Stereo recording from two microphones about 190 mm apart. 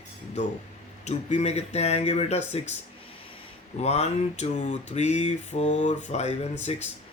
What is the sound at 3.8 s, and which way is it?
Mantra, 35° left (ahead or behind).